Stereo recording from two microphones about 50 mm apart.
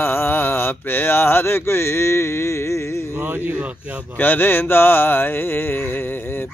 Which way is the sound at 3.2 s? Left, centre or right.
Right.